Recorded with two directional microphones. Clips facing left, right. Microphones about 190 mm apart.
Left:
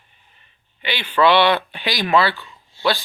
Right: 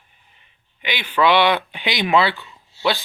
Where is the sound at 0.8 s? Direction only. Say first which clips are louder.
Left 2 dB; 10° right (ahead or behind).